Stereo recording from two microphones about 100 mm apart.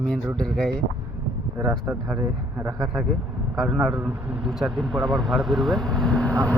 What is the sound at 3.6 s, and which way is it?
A man's voice, centre (ahead or behind).